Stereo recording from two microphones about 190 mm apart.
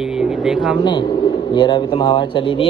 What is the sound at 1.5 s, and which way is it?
Speech, 25° left (ahead or behind).